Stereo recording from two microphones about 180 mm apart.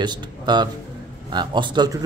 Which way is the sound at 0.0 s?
25° right (ahead or behind).